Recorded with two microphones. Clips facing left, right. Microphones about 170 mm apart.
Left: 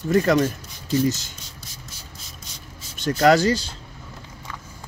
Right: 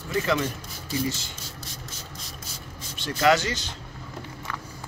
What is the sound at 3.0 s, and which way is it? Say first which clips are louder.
Speech: left 5 dB; 40° left (ahead or behind).